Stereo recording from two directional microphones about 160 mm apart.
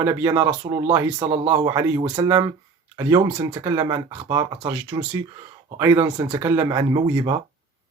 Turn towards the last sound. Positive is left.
turn(degrees=-25)  # may be behind; listen again after turning